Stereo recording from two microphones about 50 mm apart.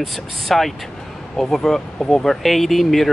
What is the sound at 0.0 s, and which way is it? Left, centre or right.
Speech, centre.